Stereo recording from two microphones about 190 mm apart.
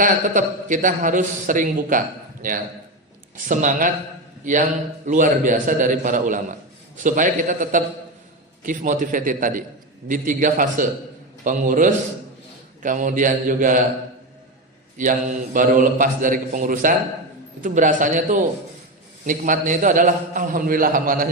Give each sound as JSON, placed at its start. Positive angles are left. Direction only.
{"t": 0.0, "sound": "a man's voice", "side_deg": -45}
{"t": 5.0, "sound": "a man's voice", "side_deg": -45}
{"t": 14.9, "sound": "a man's voice", "side_deg": -45}